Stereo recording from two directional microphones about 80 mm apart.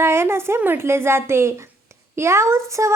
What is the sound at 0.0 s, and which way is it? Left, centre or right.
A woman's voice, right.